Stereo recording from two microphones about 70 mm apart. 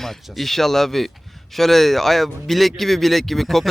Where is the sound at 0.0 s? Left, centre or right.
Centre.